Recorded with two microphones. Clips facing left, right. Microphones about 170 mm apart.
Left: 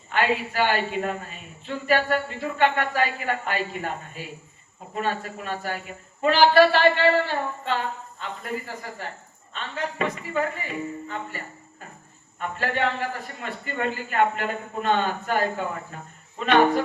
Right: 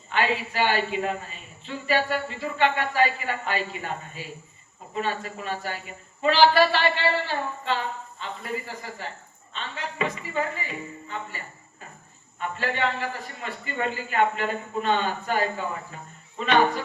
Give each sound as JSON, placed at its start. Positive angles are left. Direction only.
{"t": 0.1, "sound": "a man's voice", "side_deg": 45}